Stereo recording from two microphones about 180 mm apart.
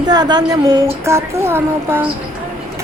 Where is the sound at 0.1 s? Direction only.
20° right (ahead or behind).